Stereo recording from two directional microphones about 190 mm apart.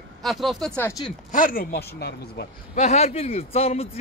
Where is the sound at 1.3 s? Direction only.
45° left (ahead or behind).